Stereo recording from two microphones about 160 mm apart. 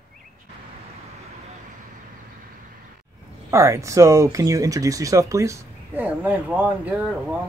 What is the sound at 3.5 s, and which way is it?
Speech, 20° right (ahead or behind).